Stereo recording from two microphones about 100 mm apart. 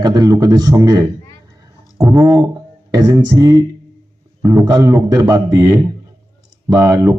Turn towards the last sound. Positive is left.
turn(degrees=-35)  # may be behind; listen again after turning